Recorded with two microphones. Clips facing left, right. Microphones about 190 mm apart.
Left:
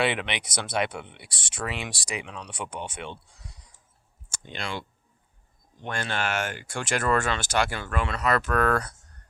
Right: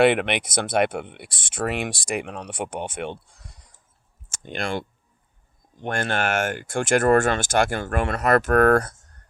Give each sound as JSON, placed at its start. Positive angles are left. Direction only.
{"t": 0.0, "sound": "speech", "side_deg": -55}